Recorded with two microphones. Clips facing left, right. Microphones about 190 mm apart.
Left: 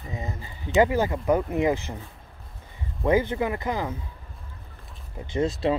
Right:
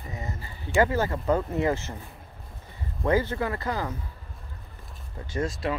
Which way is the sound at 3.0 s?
15° left (ahead or behind).